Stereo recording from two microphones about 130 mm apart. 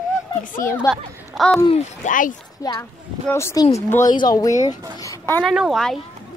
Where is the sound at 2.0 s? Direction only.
90° left.